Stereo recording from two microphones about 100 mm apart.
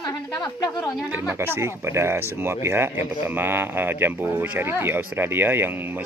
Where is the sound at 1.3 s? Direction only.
25° right (ahead or behind).